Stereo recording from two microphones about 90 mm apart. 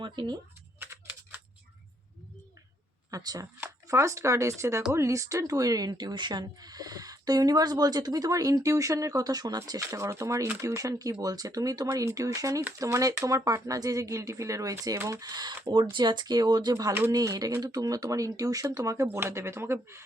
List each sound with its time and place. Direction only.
0.0 s speech: 60° right (ahead or behind)
0.8 s typing: 25° right (ahead or behind)
3.1 s speech: 40° right (ahead or behind)
15.2 s speech: 50° right (ahead or behind)
16.7 s speech: 30° right (ahead or behind)
17.1 s speech: 45° right (ahead or behind)